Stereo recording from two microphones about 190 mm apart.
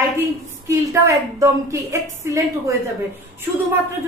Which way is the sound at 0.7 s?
15° right (ahead or behind).